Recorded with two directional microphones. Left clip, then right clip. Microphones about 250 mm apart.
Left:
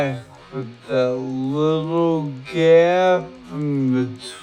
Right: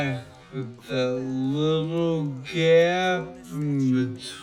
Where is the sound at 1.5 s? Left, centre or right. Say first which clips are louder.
Left 6 dB; centre.